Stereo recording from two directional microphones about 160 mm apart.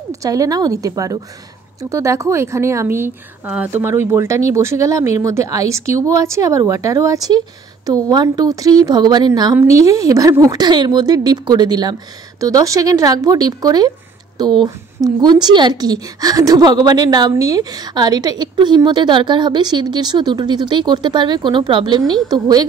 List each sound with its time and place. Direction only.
0.1 s a woman's voice: 20° right (ahead or behind)